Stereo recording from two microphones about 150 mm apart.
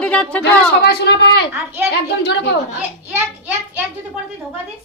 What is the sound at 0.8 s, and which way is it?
Speech, 90° left.